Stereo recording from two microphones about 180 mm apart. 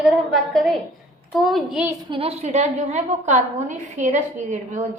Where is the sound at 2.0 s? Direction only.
30° right (ahead or behind).